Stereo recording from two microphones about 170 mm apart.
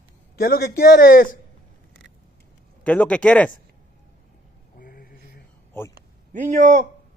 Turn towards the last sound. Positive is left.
turn(degrees=-45)  # may be behind; listen again after turning